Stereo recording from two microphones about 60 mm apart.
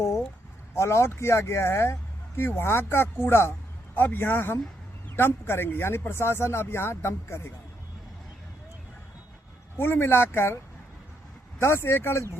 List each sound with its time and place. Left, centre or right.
0.8 s speech: left
9.7 s speech: left
11.6 s speech: left